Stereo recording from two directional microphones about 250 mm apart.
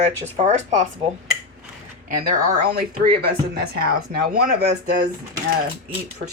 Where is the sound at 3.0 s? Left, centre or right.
Right.